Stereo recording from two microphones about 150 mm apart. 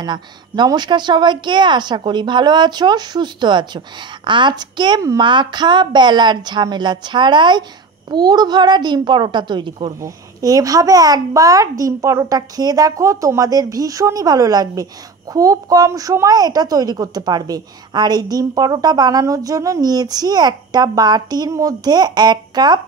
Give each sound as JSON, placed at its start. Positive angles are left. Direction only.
{"t": 0.0, "sound": "a woman's voice", "side_deg": -30}